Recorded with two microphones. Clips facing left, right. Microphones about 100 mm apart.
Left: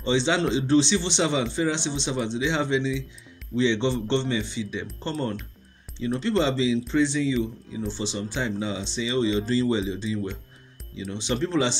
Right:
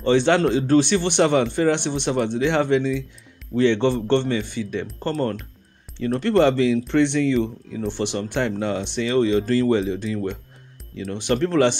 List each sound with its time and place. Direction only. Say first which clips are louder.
0.0 s a man's voice: right 6 dB; 55° right (ahead or behind)